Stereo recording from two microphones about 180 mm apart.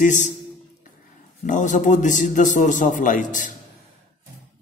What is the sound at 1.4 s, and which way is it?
A man's voice, 45° left (ahead or behind).